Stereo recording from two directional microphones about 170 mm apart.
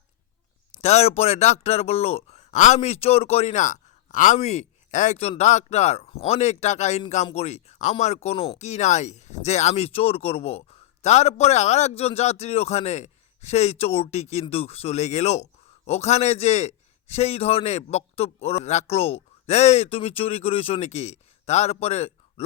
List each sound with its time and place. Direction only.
0.8 s speech: 40° left (ahead or behind)